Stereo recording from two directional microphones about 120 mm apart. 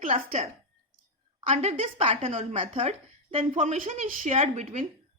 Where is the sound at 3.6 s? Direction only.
80° right.